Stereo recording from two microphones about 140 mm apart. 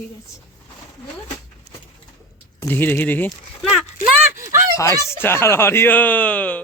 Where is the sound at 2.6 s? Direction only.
15° left (ahead or behind).